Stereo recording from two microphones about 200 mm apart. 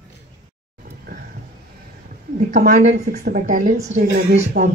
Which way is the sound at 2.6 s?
40° right (ahead or behind).